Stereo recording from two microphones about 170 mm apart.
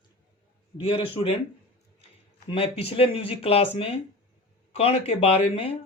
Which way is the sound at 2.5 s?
35° left (ahead or behind).